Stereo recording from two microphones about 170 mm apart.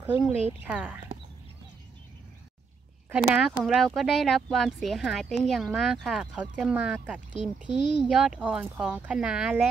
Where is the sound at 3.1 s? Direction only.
5° right (ahead or behind).